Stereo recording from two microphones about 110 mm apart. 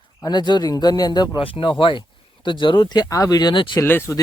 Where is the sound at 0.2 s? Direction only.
40° left (ahead or behind).